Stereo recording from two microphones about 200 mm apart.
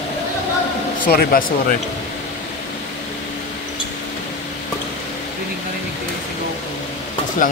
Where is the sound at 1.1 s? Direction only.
50° left (ahead or behind).